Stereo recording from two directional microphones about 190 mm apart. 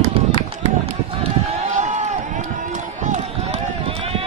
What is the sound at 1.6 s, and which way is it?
Run, 40° right (ahead or behind).